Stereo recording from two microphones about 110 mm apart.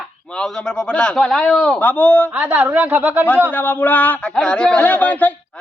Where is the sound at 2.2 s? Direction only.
15° right (ahead or behind).